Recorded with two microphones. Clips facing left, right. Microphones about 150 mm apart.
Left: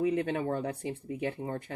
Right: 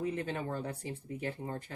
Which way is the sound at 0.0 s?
65° left (ahead or behind).